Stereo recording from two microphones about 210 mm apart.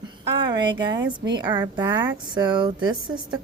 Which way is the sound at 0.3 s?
20° right (ahead or behind).